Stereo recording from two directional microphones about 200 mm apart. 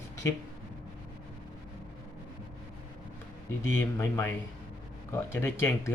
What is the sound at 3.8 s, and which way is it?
Speech, 10° left (ahead or behind).